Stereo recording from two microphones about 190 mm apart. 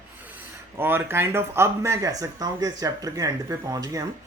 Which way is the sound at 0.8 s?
10° right (ahead or behind).